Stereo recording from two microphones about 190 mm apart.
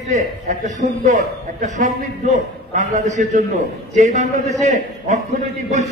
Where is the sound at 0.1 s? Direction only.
40° right (ahead or behind).